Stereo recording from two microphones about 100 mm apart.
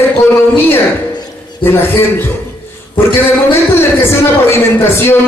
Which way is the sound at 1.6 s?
20° left (ahead or behind).